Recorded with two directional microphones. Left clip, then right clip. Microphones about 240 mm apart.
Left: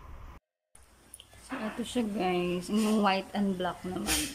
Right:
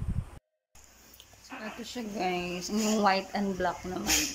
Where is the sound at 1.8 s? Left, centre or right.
Centre.